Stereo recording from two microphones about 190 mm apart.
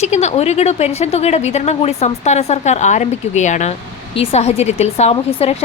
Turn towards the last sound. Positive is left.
turn(degrees=30)  # may be behind; listen again after turning